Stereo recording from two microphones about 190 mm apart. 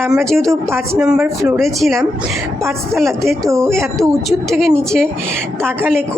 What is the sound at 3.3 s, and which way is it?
Speech, 15° right (ahead or behind).